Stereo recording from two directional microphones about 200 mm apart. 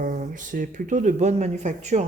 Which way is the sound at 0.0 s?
40° right (ahead or behind).